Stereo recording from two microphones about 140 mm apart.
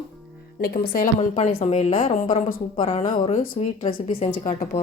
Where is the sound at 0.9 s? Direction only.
65° left (ahead or behind).